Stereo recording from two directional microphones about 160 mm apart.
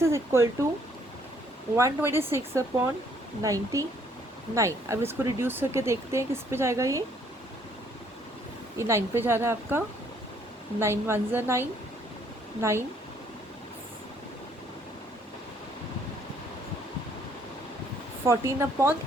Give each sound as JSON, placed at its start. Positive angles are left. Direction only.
{"t": 0.0, "sound": "speech", "side_deg": -15}
{"t": 1.7, "sound": "speech", "side_deg": -15}
{"t": 8.8, "sound": "speech", "side_deg": -15}
{"t": 18.3, "sound": "speech", "side_deg": -20}